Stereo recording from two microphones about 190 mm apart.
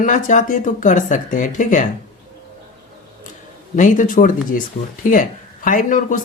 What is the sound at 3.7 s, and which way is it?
Speech, 40° left (ahead or behind).